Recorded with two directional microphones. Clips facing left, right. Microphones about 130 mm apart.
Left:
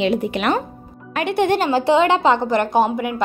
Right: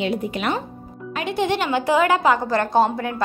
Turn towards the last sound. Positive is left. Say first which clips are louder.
# left 1 dB
turn(degrees=15)  # may be behind; listen again after turning